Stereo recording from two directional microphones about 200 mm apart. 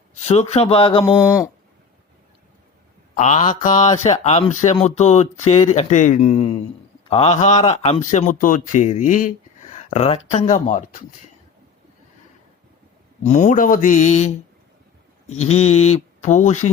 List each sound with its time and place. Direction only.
0.1 s speech: 30° left (ahead or behind)
1.2 s speech: 15° left (ahead or behind)
3.2 s speech: 35° left (ahead or behind)
13.2 s speech: 40° left (ahead or behind)
15.4 s speech: 30° left (ahead or behind)